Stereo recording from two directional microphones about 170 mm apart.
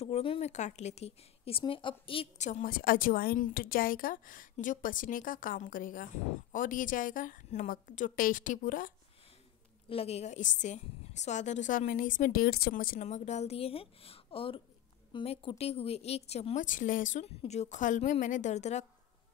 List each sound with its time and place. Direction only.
0.0 s a woman's voice: 35° left (ahead or behind); by 8.9 s 55° left (ahead or behind)
9.8 s a woman's voice: 35° left (ahead or behind)